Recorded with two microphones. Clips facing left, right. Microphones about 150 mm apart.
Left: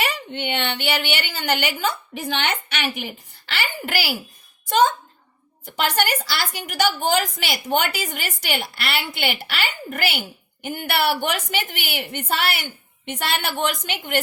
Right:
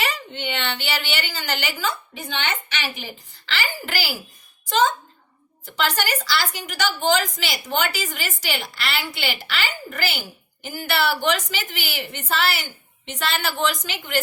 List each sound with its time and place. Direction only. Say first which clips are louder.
0.0 s a woman's voice: left 2 dB; 55° left (ahead or behind)